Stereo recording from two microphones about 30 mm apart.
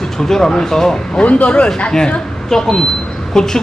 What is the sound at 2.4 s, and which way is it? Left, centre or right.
Speech, centre.